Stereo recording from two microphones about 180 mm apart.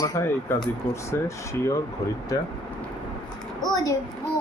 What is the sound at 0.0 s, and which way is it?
Speech, 15° left (ahead or behind).